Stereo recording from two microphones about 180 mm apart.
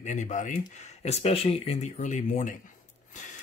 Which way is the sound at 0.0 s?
40° left (ahead or behind).